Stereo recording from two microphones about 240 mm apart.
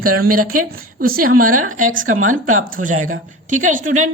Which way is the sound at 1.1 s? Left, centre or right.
Right.